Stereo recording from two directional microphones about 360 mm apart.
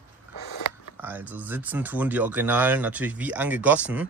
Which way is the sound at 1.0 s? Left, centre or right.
Centre.